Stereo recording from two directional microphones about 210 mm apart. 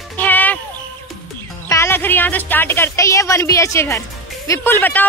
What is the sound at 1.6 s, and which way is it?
Speech, 10° left (ahead or behind).